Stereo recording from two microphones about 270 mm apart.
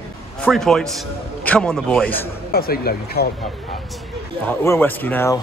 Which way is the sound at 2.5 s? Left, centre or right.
Left.